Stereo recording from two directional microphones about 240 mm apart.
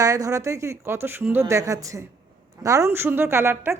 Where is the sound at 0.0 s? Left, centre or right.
Centre.